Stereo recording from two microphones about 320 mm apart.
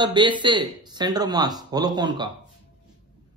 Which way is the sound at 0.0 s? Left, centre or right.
Centre.